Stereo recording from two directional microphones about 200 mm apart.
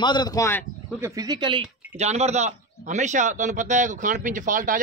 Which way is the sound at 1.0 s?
15° right (ahead or behind).